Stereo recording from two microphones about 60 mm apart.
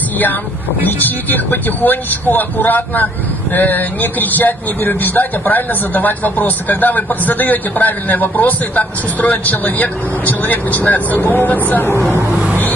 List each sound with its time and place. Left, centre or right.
0.8 s speech: left